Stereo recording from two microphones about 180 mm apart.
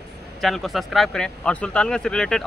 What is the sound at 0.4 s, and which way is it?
Speech, centre (ahead or behind).